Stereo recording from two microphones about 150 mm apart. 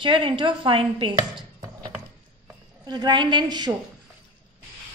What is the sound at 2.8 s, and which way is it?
Speech, 30° right (ahead or behind).